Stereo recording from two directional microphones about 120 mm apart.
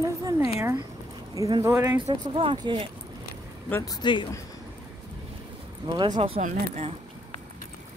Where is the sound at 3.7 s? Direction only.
25° left (ahead or behind).